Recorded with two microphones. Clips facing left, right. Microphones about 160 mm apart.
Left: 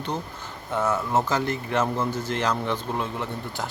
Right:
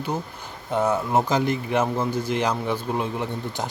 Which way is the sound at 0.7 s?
15° right (ahead or behind).